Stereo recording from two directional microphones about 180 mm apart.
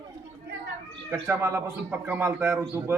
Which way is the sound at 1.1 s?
15° right (ahead or behind).